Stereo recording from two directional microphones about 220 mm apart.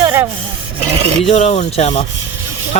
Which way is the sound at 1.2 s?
30° left (ahead or behind).